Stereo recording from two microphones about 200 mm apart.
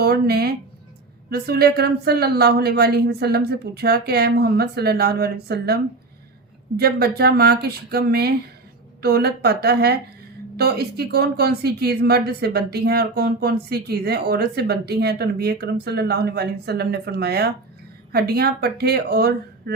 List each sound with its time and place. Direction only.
0.0 s speech: 50° right (ahead or behind)